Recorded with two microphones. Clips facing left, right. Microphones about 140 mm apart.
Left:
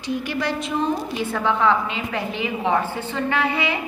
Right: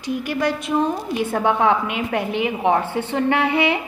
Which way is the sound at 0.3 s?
50° right (ahead or behind).